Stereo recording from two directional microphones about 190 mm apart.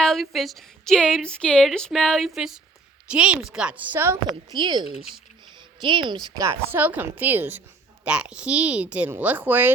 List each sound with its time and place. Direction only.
0.0 s a woman's voice: centre (ahead or behind)
4.5 s speech: 25° right (ahead or behind)
6.5 s a woman's voice: 10° right (ahead or behind)